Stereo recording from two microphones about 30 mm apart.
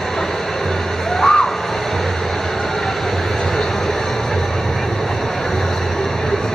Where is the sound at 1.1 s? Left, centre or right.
Centre.